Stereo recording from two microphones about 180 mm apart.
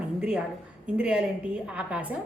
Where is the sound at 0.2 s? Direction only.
5° right (ahead or behind).